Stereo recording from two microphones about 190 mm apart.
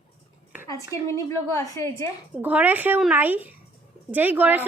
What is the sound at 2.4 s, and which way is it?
A woman's voice, 10° right (ahead or behind).